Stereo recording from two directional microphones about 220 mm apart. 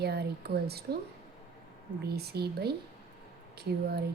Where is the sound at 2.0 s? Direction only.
45° right (ahead or behind).